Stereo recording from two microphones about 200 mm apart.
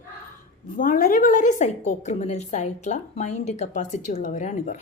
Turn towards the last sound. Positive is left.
turn(degrees=40)  # may be behind; listen again after turning